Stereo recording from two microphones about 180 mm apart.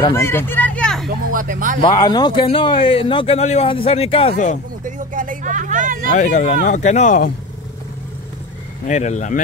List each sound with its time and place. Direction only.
0.1 s speech: 15° left (ahead or behind)
1.0 s speech: 50° right (ahead or behind)
1.8 s speech: 25° left (ahead or behind)
4.8 s vehicle: 45° right (ahead or behind)
6.1 s speech: 40° left (ahead or behind)
8.8 s speech: 40° left (ahead or behind)